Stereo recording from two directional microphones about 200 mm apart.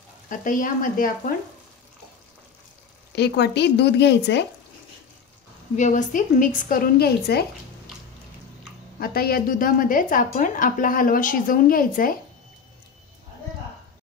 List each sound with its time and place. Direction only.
0.3 s a woman's voice: 40° left (ahead or behind)
3.2 s speech: 55° left (ahead or behind)
5.8 s a woman's voice: 40° left (ahead or behind)
9.0 s a woman's voice: 50° left (ahead or behind)